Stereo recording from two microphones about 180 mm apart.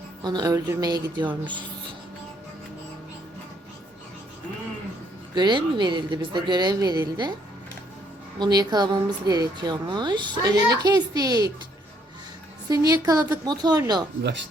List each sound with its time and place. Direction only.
0.2 s a woman's voice: 20° right (ahead or behind)
5.3 s a woman's voice: 25° right (ahead or behind)
8.4 s a woman's voice: 20° right (ahead or behind)
12.6 s a woman's voice: 20° right (ahead or behind)